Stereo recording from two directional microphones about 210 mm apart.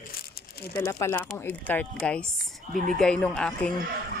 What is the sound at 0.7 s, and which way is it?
Speech, 10° left (ahead or behind).